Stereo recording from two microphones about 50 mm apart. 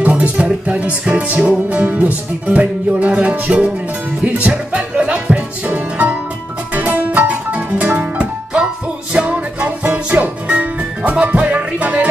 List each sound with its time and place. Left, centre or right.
0.2 s music: right
9.3 s music: right